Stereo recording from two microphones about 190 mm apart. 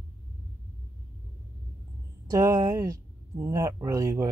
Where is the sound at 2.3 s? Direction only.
15° right (ahead or behind).